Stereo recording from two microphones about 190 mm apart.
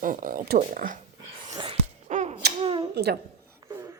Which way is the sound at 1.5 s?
30° right (ahead or behind).